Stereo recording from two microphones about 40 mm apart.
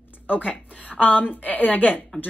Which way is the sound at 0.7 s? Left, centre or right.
Left.